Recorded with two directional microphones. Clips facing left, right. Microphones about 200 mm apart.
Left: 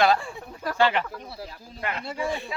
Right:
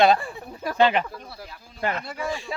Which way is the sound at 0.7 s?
20° right (ahead or behind).